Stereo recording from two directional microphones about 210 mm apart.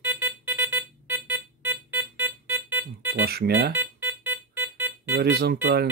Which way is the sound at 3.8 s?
10° right (ahead or behind).